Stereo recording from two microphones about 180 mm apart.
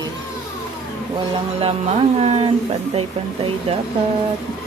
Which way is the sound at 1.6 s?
35° right (ahead or behind).